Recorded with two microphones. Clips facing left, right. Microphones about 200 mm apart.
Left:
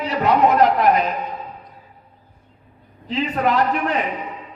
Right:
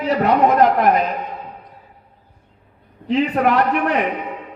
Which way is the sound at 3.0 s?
60° right (ahead or behind).